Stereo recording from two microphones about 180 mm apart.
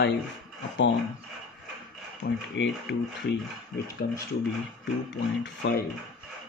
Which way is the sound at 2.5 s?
80° left.